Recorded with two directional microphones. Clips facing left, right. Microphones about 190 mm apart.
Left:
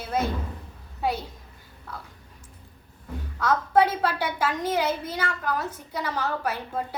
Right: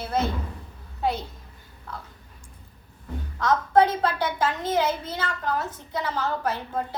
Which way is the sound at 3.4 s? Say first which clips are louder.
Right 1 dB; 5° left (ahead or behind).